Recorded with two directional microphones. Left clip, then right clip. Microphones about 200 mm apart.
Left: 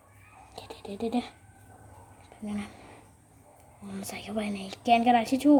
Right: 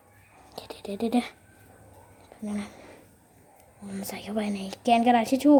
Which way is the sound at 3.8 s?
10° right (ahead or behind).